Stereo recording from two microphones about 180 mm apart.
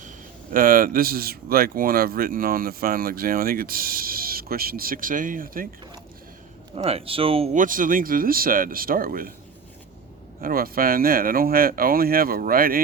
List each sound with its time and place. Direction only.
0.5 s speech: 50° right (ahead or behind)
6.7 s speech: 30° right (ahead or behind)
7.5 s speech: 50° right (ahead or behind)
10.4 s speech: 55° right (ahead or behind)